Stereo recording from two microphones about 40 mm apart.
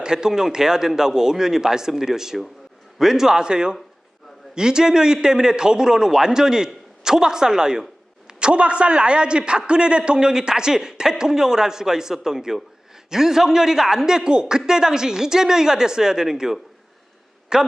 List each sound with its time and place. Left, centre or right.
0.0 s a man's voice: centre